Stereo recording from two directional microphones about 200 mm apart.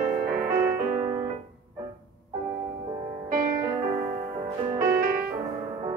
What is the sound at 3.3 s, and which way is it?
Music, 45° right (ahead or behind).